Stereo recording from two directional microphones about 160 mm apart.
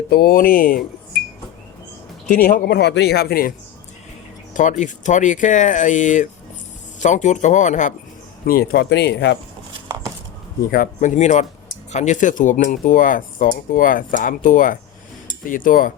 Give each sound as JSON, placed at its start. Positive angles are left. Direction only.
{"t": 0.1, "sound": "speech", "side_deg": 70}
{"t": 2.2, "sound": "speech", "side_deg": 60}
{"t": 4.5, "sound": "speech", "side_deg": 50}
{"t": 8.4, "sound": "speech", "side_deg": 80}
{"t": 10.7, "sound": "speech", "side_deg": 55}